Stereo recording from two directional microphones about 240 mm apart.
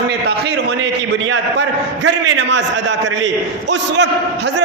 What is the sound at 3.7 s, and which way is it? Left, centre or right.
Speech, right.